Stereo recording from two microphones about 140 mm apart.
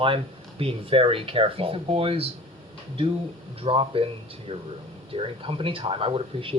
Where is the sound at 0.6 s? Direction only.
40° right (ahead or behind).